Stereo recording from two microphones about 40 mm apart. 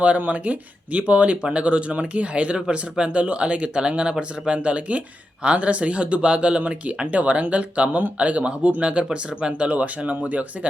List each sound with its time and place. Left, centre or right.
0.0 s speech: right